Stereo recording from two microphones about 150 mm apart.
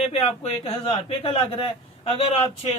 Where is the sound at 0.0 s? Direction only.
40° left (ahead or behind).